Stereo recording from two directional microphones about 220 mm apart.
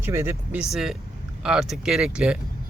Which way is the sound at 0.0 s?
10° right (ahead or behind).